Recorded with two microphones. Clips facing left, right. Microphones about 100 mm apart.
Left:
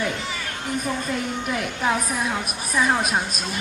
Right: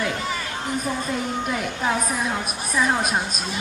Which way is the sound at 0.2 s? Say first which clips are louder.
Right 3 dB; 45° right (ahead or behind).